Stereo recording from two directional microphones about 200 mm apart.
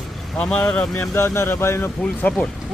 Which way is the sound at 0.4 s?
5° left (ahead or behind).